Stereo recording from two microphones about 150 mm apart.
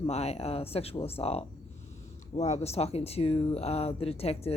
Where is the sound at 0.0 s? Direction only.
45° left (ahead or behind).